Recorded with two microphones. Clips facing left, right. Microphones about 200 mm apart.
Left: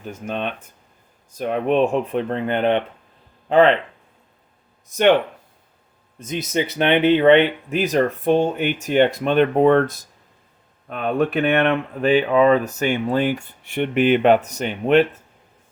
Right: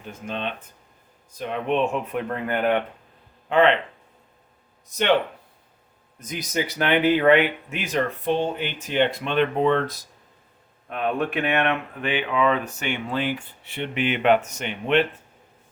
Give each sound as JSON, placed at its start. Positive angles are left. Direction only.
{"t": 0.1, "sound": "speech", "side_deg": 45}
{"t": 3.5, "sound": "speech", "side_deg": 35}
{"t": 4.9, "sound": "speech", "side_deg": 50}
{"t": 6.1, "sound": "speech", "side_deg": 25}
{"t": 10.8, "sound": "speech", "side_deg": 35}